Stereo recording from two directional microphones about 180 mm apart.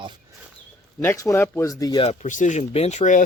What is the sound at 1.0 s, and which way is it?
Speech, 15° left (ahead or behind).